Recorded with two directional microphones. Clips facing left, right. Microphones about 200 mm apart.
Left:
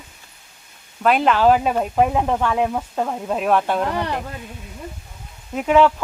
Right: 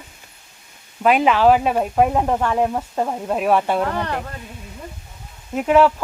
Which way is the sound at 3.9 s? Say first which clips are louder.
Even; 10° left (ahead or behind).